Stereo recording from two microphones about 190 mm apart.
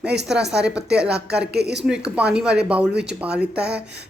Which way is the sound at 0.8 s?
60° right (ahead or behind).